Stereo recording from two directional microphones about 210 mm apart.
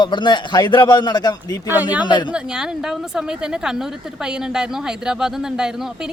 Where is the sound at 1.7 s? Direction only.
10° right (ahead or behind).